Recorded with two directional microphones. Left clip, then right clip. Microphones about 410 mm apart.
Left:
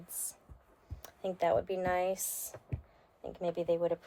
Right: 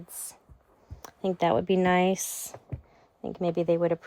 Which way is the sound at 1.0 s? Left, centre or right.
Centre.